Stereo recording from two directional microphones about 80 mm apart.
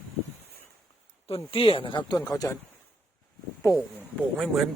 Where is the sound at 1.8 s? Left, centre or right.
Left.